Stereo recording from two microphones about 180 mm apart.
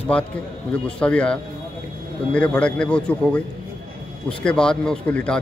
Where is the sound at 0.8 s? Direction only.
5° left (ahead or behind).